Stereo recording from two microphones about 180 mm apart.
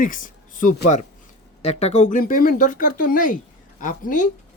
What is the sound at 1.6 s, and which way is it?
Speech, 35° left (ahead or behind).